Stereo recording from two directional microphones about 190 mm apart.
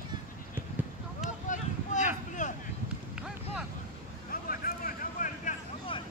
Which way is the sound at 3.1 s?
5° right (ahead or behind).